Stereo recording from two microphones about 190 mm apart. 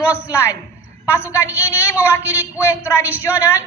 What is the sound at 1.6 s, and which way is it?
Speech, 15° left (ahead or behind).